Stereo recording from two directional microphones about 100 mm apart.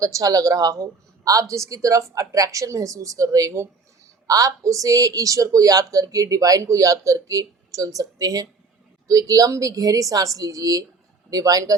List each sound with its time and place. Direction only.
0.0 s a woman's voice: 35° right (ahead or behind)